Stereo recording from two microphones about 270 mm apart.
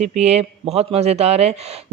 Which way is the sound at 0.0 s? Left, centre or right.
Right.